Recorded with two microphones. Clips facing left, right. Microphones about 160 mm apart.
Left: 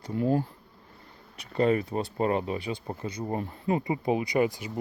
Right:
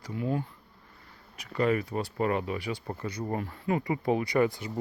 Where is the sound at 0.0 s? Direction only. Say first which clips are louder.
Left 5 dB; 35° left (ahead or behind).